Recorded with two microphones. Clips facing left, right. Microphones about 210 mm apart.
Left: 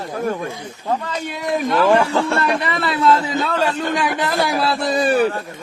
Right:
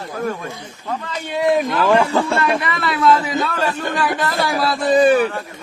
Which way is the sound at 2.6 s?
30° left (ahead or behind).